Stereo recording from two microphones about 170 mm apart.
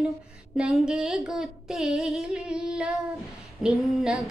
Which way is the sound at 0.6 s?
5° right (ahead or behind).